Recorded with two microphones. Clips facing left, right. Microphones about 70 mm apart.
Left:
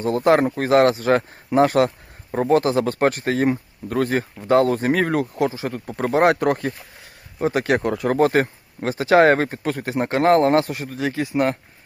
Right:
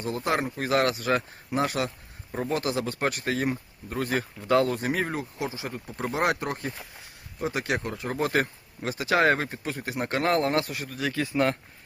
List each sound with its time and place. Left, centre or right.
0.1 s speech: left
1.5 s speech: left
4.2 s speech: left
4.6 s speech: left
6.4 s speech: left
8.3 s speech: left
10.1 s speech: left